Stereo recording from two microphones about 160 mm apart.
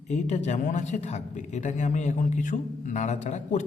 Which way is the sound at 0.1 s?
45° left (ahead or behind).